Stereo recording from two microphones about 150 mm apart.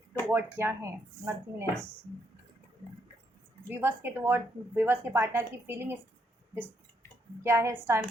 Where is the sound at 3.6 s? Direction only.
15° right (ahead or behind).